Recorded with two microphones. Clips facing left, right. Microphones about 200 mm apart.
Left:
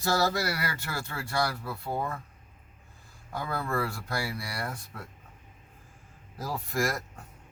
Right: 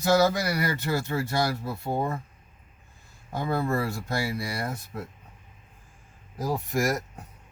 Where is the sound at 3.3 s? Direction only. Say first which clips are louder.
Right 6 dB; 25° right (ahead or behind).